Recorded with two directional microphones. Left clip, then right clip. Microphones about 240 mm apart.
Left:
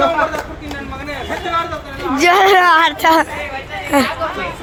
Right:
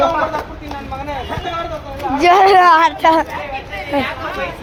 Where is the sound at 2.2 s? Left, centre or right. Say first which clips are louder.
Right 1 dB; centre.